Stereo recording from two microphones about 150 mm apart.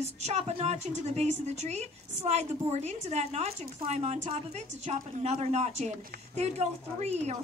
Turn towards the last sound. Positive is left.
turn(degrees=-50)  # may be behind; listen again after turning